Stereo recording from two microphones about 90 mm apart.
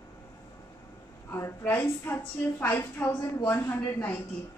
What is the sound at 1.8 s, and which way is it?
Speech, 25° left (ahead or behind).